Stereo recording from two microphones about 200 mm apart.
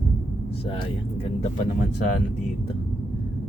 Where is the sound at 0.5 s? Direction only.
30° left (ahead or behind).